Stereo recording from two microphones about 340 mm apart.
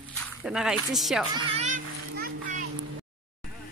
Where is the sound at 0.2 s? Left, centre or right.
Centre.